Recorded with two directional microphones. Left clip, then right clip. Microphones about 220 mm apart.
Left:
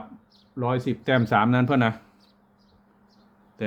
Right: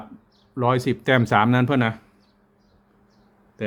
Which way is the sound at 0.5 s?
30° right (ahead or behind).